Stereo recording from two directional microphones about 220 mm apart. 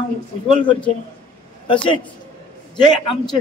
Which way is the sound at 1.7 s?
20° left (ahead or behind).